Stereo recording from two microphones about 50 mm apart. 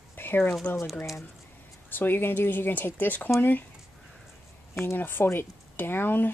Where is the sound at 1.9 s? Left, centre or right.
Left.